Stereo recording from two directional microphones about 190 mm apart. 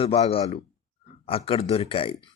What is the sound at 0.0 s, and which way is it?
A man's voice, 30° left (ahead or behind).